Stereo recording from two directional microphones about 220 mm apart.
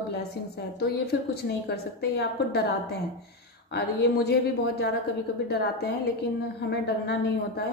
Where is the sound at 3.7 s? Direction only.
50° left (ahead or behind).